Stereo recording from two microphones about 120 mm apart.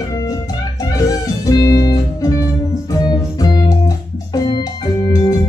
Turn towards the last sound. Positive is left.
turn(degrees=30)  # may be behind; listen again after turning